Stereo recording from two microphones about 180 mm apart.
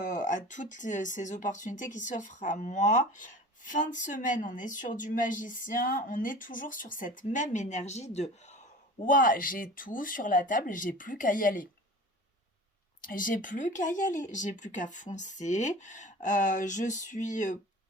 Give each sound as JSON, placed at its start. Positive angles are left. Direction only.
{"t": 0.0, "sound": "a woman's voice", "side_deg": 45}
{"t": 9.0, "sound": "a woman's voice", "side_deg": 50}
{"t": 13.0, "sound": "a woman's voice", "side_deg": 50}